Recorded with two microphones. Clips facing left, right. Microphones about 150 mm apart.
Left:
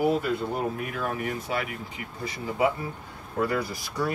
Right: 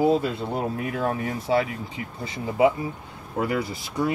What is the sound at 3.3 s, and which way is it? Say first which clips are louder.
Speech: right 1 dB; 20° right (ahead or behind).